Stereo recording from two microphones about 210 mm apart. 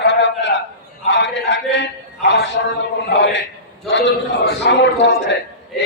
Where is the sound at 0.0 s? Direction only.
55° left (ahead or behind).